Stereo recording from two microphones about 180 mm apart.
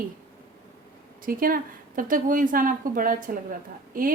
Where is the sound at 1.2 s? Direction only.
50° right (ahead or behind).